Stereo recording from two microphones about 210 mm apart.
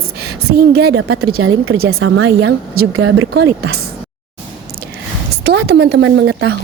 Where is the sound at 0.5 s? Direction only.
50° right (ahead or behind).